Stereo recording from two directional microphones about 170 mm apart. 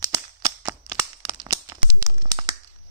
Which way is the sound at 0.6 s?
25° right (ahead or behind).